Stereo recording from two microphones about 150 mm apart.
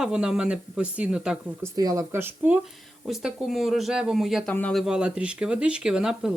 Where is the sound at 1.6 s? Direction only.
25° right (ahead or behind).